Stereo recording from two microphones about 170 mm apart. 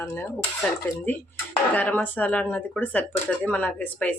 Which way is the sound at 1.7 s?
10° left (ahead or behind).